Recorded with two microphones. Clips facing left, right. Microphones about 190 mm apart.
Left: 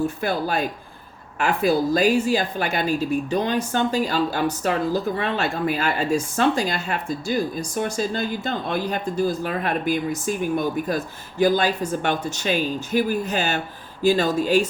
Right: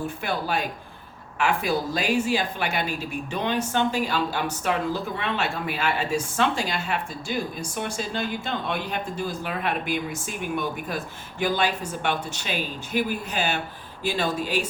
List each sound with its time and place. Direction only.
0.2 s speech: 40° left (ahead or behind)